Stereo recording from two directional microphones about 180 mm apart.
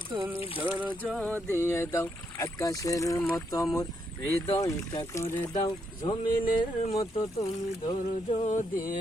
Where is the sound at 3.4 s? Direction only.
20° left (ahead or behind).